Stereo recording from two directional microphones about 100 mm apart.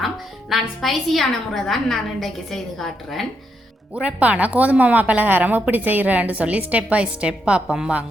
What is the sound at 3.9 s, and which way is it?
A woman's voice, 10° right (ahead or behind).